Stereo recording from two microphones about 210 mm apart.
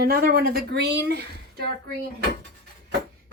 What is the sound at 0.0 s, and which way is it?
A woman's voice, 45° right (ahead or behind).